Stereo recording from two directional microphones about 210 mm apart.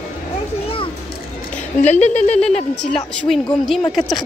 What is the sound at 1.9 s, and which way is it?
Speech, 35° left (ahead or behind).